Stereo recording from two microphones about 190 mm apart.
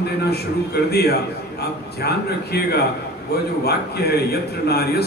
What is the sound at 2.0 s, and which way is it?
A man's voice, 60° left (ahead or behind).